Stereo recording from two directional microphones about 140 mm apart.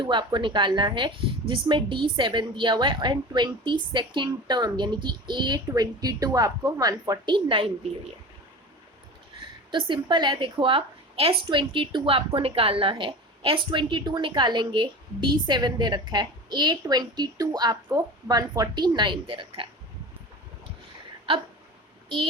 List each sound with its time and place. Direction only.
0.0 s a woman's voice: 35° right (ahead or behind)
9.7 s a woman's voice: 35° right (ahead or behind)